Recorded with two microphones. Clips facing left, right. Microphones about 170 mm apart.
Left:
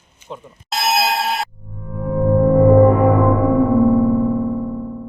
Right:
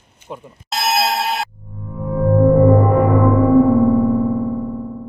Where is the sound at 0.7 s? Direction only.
Centre (ahead or behind).